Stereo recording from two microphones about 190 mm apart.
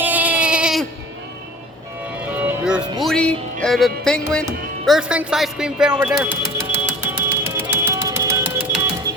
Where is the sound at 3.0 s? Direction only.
5° left (ahead or behind).